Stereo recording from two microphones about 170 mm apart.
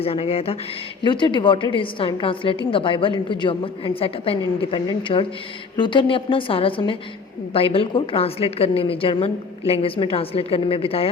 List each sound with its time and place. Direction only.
0.0 s a woman's voice: 35° left (ahead or behind)